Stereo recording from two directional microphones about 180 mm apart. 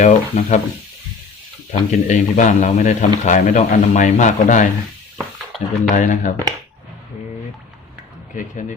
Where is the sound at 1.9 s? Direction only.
45° left (ahead or behind).